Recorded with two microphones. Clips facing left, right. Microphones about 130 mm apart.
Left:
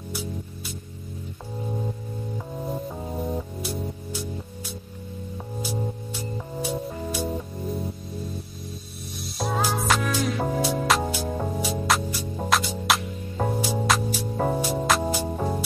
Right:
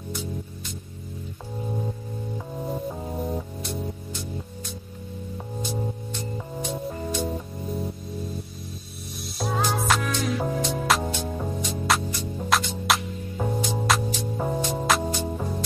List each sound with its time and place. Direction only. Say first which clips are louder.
2.3 s music: even; centre (ahead or behind)
5.6 s music: even; 5° left (ahead or behind)
9.4 s music: even; centre (ahead or behind)